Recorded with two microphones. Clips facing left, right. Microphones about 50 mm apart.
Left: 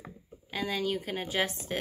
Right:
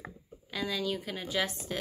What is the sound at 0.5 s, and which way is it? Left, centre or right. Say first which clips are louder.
Speech: left 2 dB; left.